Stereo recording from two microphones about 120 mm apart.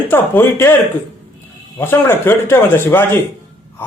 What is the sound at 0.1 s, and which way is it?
Speech, 20° left (ahead or behind).